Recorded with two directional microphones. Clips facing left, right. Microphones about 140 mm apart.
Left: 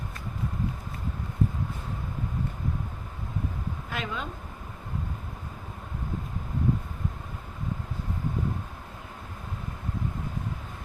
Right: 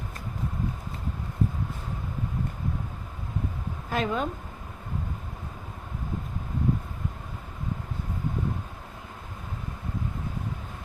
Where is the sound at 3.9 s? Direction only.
40° right (ahead or behind).